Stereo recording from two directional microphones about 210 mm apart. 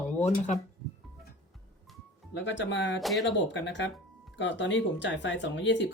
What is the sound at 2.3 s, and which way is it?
Speech, 60° left (ahead or behind).